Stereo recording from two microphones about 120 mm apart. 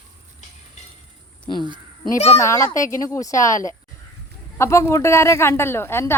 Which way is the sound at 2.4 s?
25° left (ahead or behind).